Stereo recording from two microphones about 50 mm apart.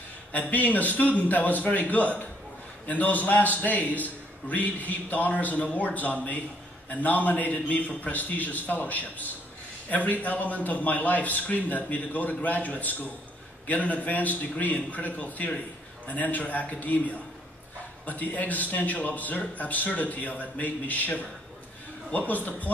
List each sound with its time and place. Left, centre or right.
0.3 s a man's voice: left
18.0 s a man's voice: left